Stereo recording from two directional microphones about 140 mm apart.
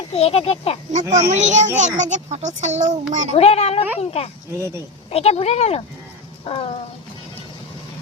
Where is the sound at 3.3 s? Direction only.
50° left (ahead or behind).